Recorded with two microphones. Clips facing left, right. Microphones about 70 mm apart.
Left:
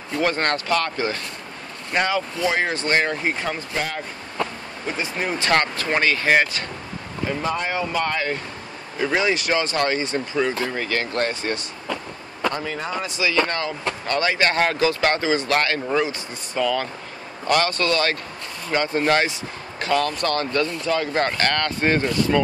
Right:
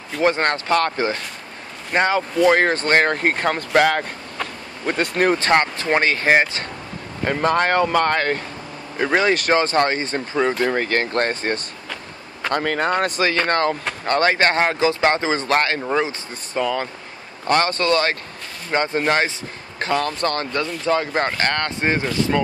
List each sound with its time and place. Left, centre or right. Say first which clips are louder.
0.2 s speech: right 4 dB; right
2.3 s speech: right 7 dB; right
3.7 s speech: right 14 dB; right
4.8 s speech: right 7 dB; right
5.5 s speech: right 3 dB; right
7.2 s speech: right 7 dB; right
12.5 s speech: right 7 dB; right; by 22.4 s centre